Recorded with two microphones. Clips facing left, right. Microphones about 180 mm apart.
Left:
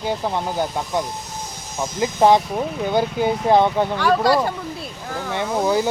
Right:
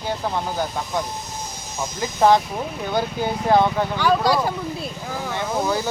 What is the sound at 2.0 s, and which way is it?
Speech, 20° left (ahead or behind).